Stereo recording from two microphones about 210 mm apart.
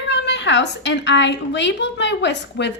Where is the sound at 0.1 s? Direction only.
55° left (ahead or behind).